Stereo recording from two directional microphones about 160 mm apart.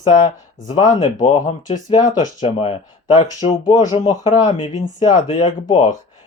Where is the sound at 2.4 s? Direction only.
35° left (ahead or behind).